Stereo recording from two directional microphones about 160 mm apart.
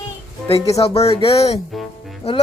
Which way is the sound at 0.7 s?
40° left (ahead or behind).